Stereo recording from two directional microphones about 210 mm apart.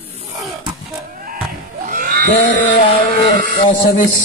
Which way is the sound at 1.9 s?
40° right (ahead or behind).